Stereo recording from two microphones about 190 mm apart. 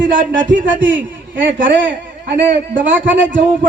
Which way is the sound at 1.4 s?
75° right (ahead or behind).